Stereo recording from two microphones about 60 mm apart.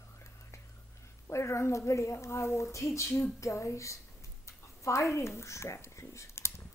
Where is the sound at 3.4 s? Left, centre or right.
Left.